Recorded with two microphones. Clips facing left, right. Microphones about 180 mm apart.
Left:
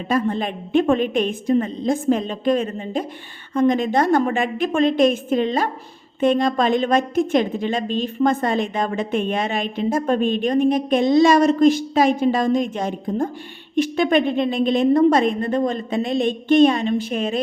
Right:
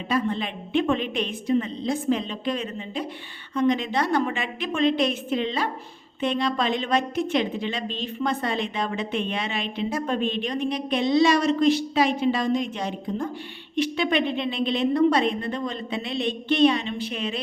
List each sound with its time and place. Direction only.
0.1 s a woman's voice: 45° left (ahead or behind)